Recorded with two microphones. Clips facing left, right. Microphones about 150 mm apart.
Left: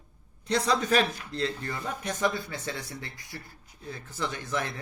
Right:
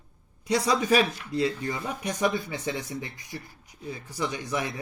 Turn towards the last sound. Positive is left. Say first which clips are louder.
# right 2 dB
turn(degrees=-15)  # may be behind; listen again after turning